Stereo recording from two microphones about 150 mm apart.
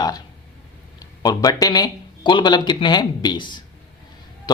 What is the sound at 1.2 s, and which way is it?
Speech, 25° left (ahead or behind).